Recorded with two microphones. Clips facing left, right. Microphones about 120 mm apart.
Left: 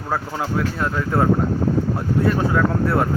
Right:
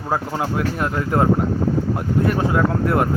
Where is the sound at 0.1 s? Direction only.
15° right (ahead or behind).